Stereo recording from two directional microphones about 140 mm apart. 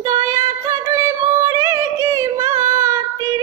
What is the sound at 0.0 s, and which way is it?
Music, 25° right (ahead or behind).